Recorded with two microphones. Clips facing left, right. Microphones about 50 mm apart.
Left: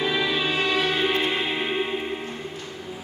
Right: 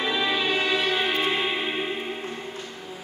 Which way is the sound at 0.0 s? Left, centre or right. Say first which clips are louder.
Left 1 dB; centre.